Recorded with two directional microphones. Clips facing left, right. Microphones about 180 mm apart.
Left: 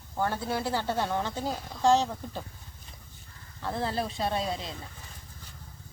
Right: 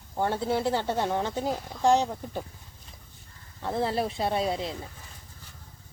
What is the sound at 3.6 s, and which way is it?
A woman's voice, 25° right (ahead or behind).